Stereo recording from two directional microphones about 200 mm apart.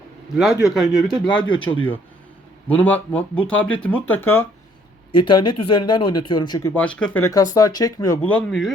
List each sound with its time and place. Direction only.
0.6 s speech: centre (ahead or behind)
1.4 s speech: 25° left (ahead or behind)
2.6 s speech: 10° left (ahead or behind)
5.1 s speech: 25° left (ahead or behind)
8.3 s speech: 5° left (ahead or behind)